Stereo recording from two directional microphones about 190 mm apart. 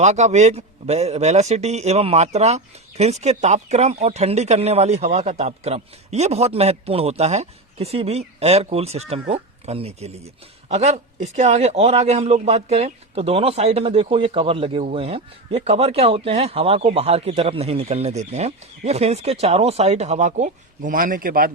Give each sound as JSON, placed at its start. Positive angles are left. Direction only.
{"t": 0.0, "sound": "a man's voice", "side_deg": -35}